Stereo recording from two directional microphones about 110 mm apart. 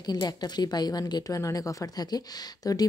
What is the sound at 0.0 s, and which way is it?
Speech, 35° left (ahead or behind).